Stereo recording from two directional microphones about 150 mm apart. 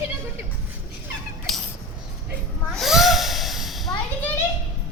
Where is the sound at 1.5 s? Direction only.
Centre (ahead or behind).